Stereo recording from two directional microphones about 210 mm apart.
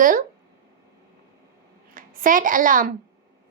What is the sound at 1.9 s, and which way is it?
Speech, 40° right (ahead or behind).